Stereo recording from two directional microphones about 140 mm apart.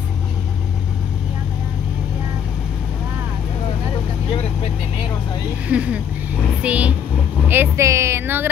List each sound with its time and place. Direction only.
5.7 s speech: 10° right (ahead or behind)
6.6 s vehicle: 10° right (ahead or behind)
7.4 s speech: 15° right (ahead or behind)